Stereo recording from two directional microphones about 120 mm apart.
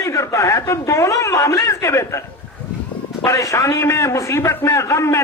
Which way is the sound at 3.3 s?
25° left (ahead or behind).